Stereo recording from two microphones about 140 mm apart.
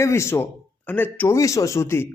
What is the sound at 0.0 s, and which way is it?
Speech, 20° left (ahead or behind).